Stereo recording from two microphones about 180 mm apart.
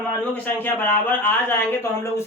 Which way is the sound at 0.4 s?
10° left (ahead or behind).